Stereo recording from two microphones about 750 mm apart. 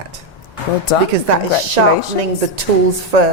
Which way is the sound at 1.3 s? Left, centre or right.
Right.